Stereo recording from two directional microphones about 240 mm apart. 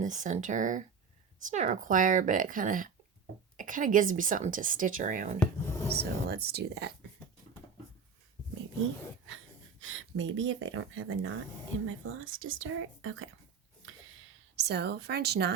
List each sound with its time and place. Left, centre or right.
0.0 s speech: right
5.4 s speech: centre
5.9 s speech: right
9.8 s speech: right
14.5 s speech: right